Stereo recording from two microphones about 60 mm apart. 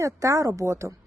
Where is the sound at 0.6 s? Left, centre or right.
Right.